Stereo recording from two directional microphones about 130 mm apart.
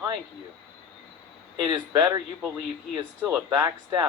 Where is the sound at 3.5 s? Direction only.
30° right (ahead or behind).